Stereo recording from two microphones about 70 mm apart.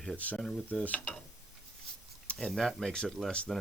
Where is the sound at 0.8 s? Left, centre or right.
Left.